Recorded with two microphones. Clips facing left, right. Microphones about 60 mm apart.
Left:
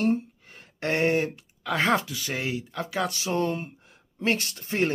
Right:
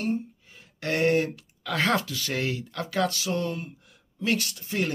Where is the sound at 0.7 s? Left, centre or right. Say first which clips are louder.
Even; left.